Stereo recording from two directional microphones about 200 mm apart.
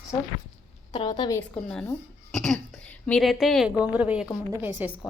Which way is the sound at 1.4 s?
5° left (ahead or behind).